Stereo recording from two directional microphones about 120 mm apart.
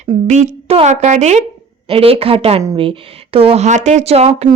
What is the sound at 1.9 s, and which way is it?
A woman's voice, 50° right (ahead or behind).